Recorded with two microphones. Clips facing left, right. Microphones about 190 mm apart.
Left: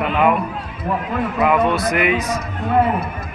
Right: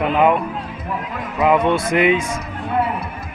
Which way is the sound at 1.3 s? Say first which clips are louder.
Right 2 dB; 20° right (ahead or behind).